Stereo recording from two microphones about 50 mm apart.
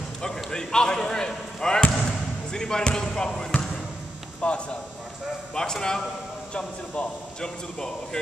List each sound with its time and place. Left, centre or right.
0.2 s a man's voice: centre
5.5 s a man's voice: centre